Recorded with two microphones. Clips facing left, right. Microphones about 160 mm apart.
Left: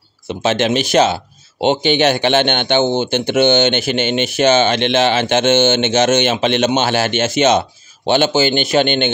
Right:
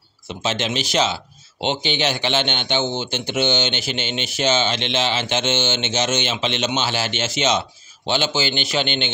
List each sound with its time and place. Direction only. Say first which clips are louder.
0.4 s a man's voice: left 8 dB; 60° left (ahead or behind)